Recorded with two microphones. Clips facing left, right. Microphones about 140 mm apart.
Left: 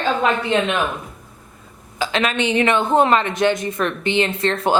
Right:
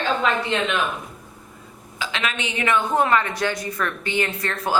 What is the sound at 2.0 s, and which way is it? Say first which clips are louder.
Speech: left 7 dB; 45° left (ahead or behind).